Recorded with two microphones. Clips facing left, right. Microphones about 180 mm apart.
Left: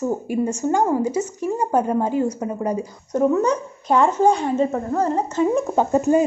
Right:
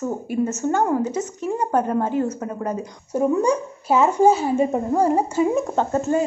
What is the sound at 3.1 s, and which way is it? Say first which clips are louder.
Speech: left 1 dB; 10° right (ahead or behind).